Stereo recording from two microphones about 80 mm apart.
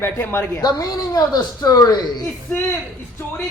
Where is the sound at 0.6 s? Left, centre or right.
Left.